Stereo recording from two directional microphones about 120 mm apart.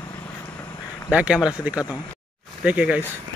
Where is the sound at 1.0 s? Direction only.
10° right (ahead or behind).